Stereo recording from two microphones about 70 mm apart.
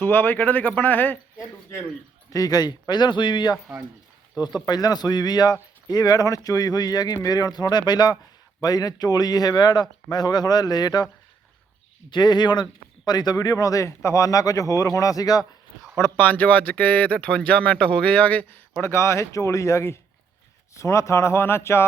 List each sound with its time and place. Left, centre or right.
0.0 s speech: left
2.3 s a man's voice: left
4.4 s speech: left
8.6 s speech: left
12.1 s a man's voice: left
13.1 s speech: left
16.0 s speech: left
16.2 s speech: left
18.8 s speech: left